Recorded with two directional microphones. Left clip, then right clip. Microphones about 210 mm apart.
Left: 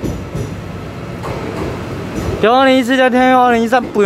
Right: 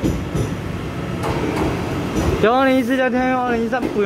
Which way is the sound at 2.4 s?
15° left (ahead or behind).